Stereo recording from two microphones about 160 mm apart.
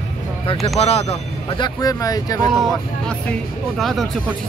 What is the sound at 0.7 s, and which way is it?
Speech, 40° left (ahead or behind).